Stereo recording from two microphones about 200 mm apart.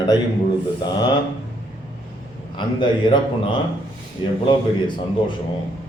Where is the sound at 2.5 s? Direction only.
25° left (ahead or behind).